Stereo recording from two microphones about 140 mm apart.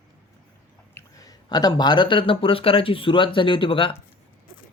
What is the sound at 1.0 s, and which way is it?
Speech, 25° left (ahead or behind).